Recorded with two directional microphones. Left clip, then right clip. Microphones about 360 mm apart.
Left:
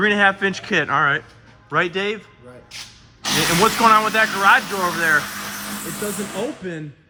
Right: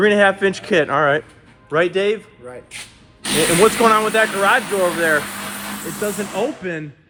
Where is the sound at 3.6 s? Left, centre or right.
Centre.